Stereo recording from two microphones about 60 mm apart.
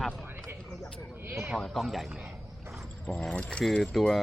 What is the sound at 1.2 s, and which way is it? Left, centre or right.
Sheep, right.